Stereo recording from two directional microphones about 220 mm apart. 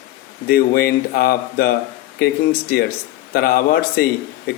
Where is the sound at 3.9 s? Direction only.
45° left (ahead or behind).